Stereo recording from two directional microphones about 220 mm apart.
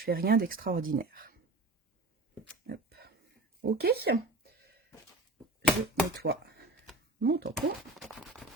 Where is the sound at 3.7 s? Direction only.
45° right (ahead or behind).